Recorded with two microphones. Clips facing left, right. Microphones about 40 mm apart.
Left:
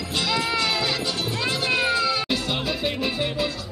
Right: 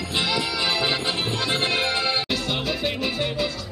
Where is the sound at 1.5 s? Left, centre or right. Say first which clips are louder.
Left 2 dB; right.